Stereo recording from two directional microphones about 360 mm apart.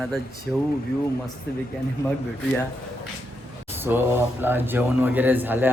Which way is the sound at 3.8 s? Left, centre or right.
Centre.